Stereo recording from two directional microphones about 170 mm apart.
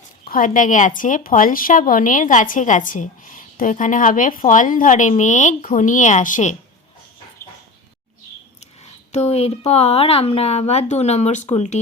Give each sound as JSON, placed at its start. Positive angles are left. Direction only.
{"t": 0.3, "sound": "a woman's voice", "side_deg": 50}
{"t": 8.8, "sound": "speech", "side_deg": 40}